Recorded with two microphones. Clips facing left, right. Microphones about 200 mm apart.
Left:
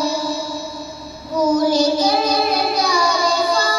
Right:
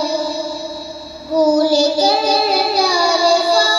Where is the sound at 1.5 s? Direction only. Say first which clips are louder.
Right 2 dB; 30° right (ahead or behind).